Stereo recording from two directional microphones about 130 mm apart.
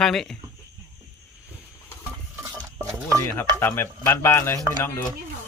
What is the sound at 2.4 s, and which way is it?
Stir, 25° right (ahead or behind).